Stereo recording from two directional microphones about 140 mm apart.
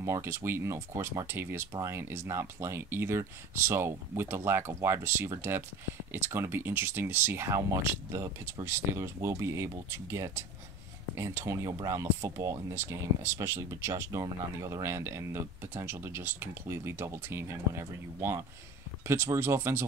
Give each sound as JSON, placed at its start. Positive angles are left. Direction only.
{"t": 0.0, "sound": "speech", "side_deg": -20}